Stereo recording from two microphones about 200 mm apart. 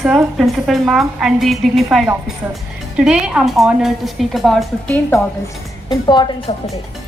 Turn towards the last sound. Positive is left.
turn(degrees=20)  # may be behind; listen again after turning